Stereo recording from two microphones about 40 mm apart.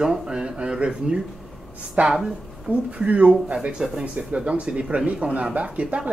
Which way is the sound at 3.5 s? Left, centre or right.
Centre.